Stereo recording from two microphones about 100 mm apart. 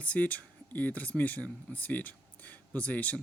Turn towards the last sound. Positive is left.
turn(degrees=15)  # may be behind; listen again after turning